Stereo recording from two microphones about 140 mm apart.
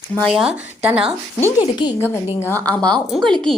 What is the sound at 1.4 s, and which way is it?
A woman's voice, 20° left (ahead or behind).